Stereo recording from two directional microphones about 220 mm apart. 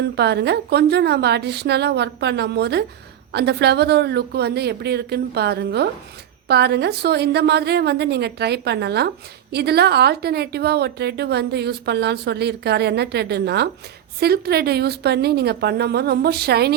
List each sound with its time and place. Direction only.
0.0 s a woman's voice: 50° right (ahead or behind)